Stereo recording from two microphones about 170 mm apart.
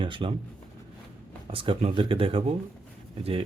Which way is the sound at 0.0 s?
30° right (ahead or behind).